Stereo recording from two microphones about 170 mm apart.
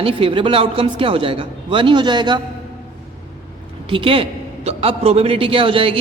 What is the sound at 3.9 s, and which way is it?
A man's voice, 30° right (ahead or behind).